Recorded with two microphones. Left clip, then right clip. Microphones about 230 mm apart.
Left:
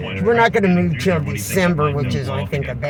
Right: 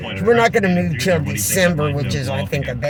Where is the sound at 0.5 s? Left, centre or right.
Right.